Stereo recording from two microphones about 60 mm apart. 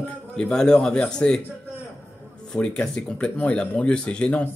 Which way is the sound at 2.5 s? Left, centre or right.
Centre.